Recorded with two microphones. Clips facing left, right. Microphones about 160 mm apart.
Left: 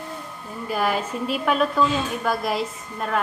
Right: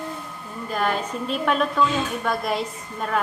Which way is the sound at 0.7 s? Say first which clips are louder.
Left 1 dB; 5° left (ahead or behind).